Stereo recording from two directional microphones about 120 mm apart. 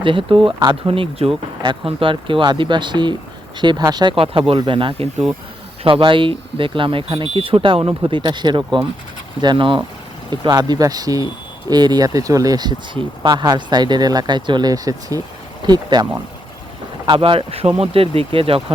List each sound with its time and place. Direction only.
0.0 s speech: 45° right (ahead or behind)
4.1 s speech: 50° right (ahead or behind)
17.1 s speech: 45° right (ahead or behind)